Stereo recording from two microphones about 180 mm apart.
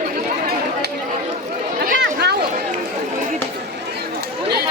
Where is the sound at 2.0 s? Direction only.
65° right (ahead or behind).